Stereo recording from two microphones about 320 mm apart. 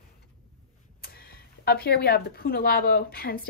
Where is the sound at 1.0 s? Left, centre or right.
Left.